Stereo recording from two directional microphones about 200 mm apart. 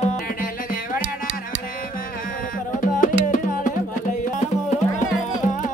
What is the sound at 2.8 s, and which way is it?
Music, 40° left (ahead or behind).